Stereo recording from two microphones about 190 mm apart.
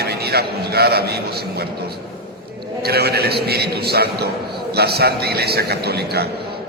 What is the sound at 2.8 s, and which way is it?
A man's voice, 55° right (ahead or behind).